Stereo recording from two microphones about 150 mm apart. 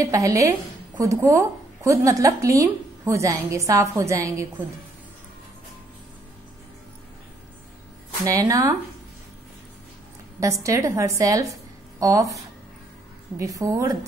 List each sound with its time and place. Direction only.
0.0 s a woman's voice: 20° right (ahead or behind)
8.3 s a woman's voice: 25° right (ahead or behind)
10.4 s a woman's voice: 20° right (ahead or behind)
13.4 s a woman's voice: 20° right (ahead or behind)